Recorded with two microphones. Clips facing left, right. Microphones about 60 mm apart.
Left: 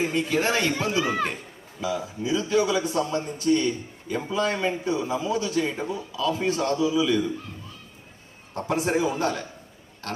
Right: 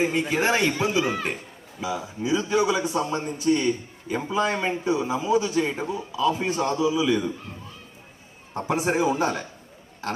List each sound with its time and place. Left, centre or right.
0.0 s a man's voice: right
8.5 s a man's voice: centre